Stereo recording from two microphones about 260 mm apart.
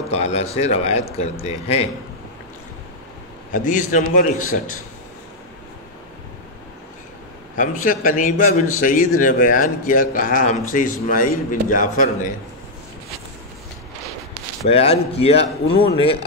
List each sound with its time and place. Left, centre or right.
0.1 s speech: left
3.5 s speech: left
7.5 s speech: left
14.7 s speech: left